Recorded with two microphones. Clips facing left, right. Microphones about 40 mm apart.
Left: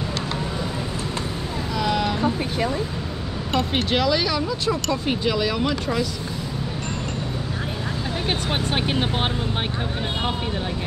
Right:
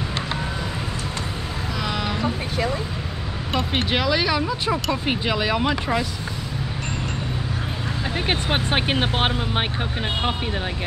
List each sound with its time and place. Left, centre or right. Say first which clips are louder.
1.8 s a sound: left 4 dB; centre
3.5 s speech: left 1 dB; centre
8.3 s speech: right 2 dB; right